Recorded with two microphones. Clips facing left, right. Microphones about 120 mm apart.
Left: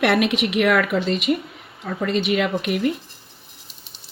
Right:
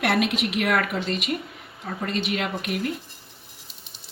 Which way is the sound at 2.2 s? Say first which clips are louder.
Left 8 dB; 90° left.